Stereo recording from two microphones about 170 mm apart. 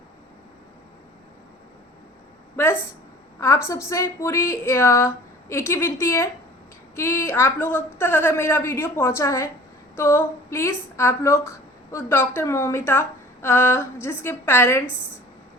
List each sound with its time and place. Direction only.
3.4 s a woman's voice: 15° left (ahead or behind)